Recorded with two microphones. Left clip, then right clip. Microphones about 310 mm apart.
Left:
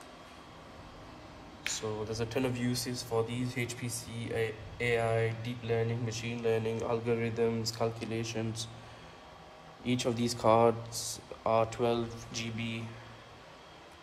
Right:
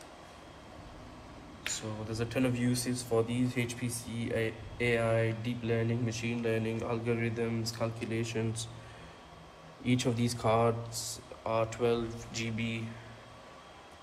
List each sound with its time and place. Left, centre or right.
1.7 s speech: centre
9.8 s speech: centre